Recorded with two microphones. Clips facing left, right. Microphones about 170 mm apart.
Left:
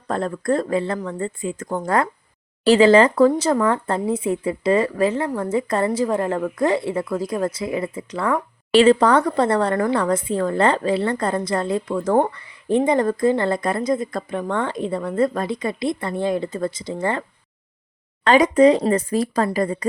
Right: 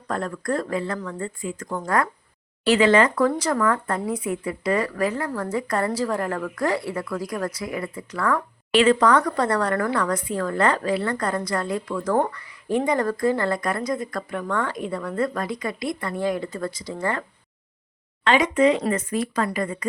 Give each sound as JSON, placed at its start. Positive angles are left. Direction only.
{"t": 0.1, "sound": "speech", "side_deg": 25}
{"t": 18.3, "sound": "speech", "side_deg": 35}